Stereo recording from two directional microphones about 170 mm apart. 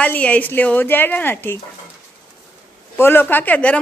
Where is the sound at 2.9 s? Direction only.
15° left (ahead or behind).